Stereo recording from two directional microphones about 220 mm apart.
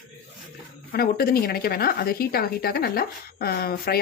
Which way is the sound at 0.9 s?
45° left (ahead or behind).